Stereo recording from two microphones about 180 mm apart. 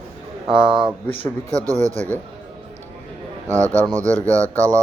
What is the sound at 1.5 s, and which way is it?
Speech, 20° right (ahead or behind).